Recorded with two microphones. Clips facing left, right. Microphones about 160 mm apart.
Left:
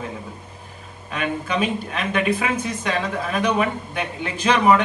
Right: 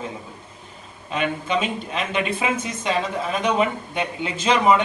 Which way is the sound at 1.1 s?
25° right (ahead or behind).